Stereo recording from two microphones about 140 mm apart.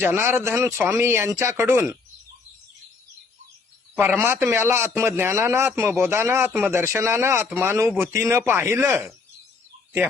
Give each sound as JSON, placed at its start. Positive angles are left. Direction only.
{"t": 0.0, "sound": "speech", "side_deg": -15}
{"t": 4.2, "sound": "speech", "side_deg": -15}